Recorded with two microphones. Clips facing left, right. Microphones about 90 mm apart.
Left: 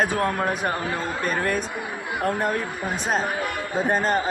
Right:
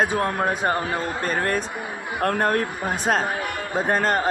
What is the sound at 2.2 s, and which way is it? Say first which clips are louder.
Speech: right 3 dB; 65° right (ahead or behind).